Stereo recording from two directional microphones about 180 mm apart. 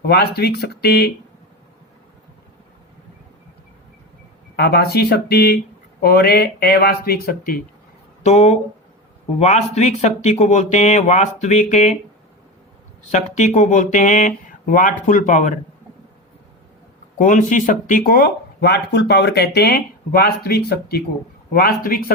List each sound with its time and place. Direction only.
0.0 s speech: 60° left (ahead or behind)
4.5 s speech: 60° left (ahead or behind)
8.2 s speech: 35° left (ahead or behind)
13.1 s speech: 40° left (ahead or behind)
17.2 s speech: 45° left (ahead or behind)